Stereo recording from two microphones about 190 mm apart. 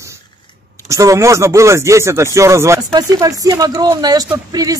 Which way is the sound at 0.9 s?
15° right (ahead or behind).